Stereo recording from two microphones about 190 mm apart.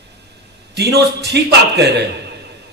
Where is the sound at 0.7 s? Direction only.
60° right (ahead or behind).